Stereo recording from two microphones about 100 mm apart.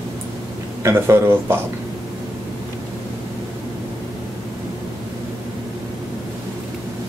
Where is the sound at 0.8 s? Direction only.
25° right (ahead or behind).